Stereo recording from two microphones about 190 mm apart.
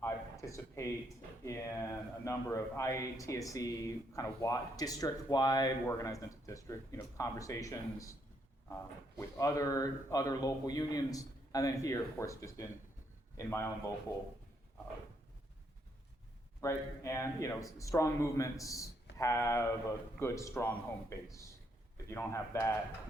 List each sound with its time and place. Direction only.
0.0 s a sound: 15° left (ahead or behind)
1.5 s speech: 15° left (ahead or behind)
16.6 s speech: 15° left (ahead or behind)